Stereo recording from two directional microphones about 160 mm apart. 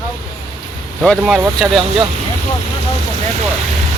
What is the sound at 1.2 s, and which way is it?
Speech, 5° right (ahead or behind).